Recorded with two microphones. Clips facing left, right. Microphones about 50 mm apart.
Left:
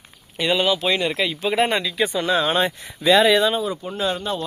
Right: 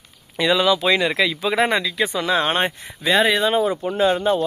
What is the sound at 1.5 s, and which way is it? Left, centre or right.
Speech, right.